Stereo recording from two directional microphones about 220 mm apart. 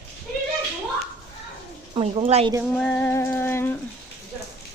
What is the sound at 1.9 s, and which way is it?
Speech, 25° right (ahead or behind).